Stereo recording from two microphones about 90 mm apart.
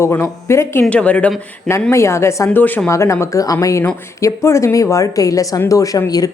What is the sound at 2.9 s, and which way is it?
Speech, 35° left (ahead or behind).